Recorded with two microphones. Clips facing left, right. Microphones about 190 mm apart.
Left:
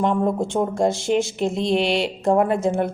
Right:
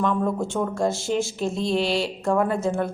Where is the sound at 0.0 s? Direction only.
20° left (ahead or behind).